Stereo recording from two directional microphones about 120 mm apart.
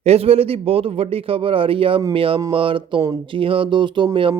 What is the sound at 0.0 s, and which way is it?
Speech, 60° right (ahead or behind).